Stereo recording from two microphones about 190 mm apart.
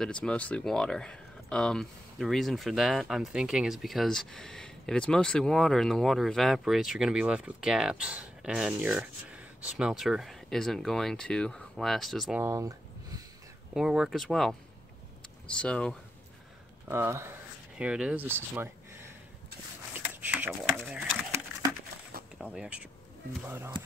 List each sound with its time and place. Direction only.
0.0 s speech: 5° left (ahead or behind)
12.4 s a sound: 15° right (ahead or behind)
13.7 s speech: 5° right (ahead or behind)
16.8 s speech: 15° right (ahead or behind)
19.9 s a sound: 10° right (ahead or behind)
22.4 s speech: 5° right (ahead or behind)